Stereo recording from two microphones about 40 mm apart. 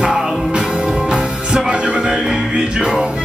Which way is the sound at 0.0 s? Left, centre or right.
Centre.